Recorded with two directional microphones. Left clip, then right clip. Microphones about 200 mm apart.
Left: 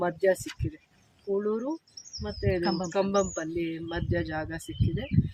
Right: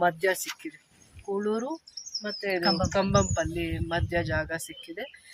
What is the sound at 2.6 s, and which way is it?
Speech, 20° right (ahead or behind).